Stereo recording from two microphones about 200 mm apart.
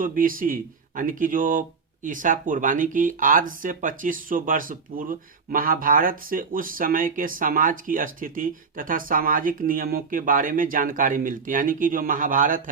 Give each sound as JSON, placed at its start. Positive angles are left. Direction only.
{"t": 0.0, "sound": "speech", "side_deg": -45}